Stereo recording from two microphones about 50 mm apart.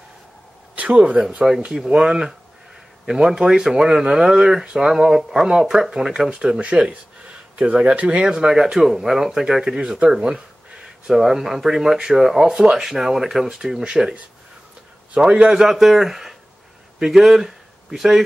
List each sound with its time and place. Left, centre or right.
0.7 s speech: right
1.5 s speech: centre
1.9 s speech: centre
8.3 s speech: centre
15.1 s speech: centre